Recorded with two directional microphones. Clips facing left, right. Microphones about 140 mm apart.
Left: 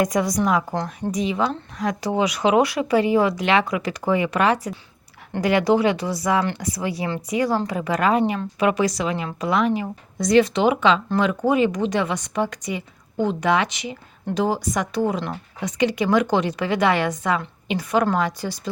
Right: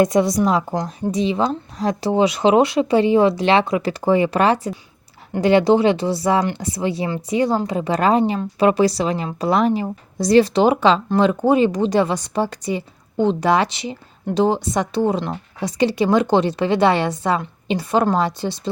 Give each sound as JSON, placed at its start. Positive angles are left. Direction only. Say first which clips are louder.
{"t": 0.0, "sound": "speech", "louder": "right 5 dB", "side_deg": -25}